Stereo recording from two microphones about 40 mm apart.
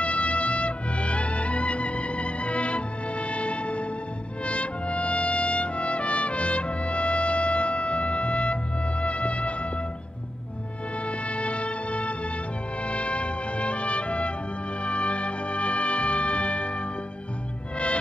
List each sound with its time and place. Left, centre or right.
0.0 s music: left
4.5 s trumpet: left
9.0 s music: left
11.1 s music: left